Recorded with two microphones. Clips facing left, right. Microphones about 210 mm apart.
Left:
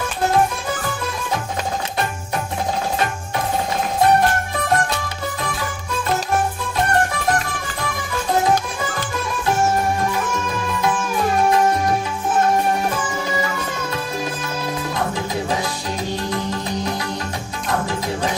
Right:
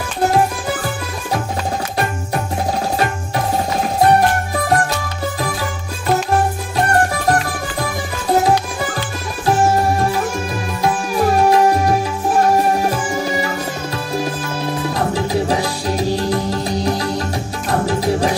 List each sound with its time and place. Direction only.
10.0 s music: 35° right (ahead or behind)
16.0 s music: 35° right (ahead or behind)